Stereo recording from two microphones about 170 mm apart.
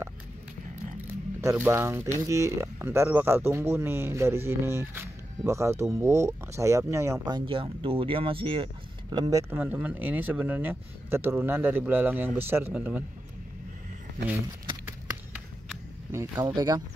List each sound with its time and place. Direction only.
1.4 s speech: 15° right (ahead or behind); by 8.6 s 30° right (ahead or behind)
9.1 s speech: 20° right (ahead or behind)
16.1 s speech: 20° right (ahead or behind)